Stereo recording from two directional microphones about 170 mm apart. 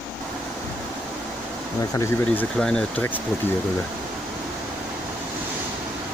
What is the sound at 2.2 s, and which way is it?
Speech, 5° left (ahead or behind).